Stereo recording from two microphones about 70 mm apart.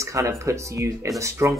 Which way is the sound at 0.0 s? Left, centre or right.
Right.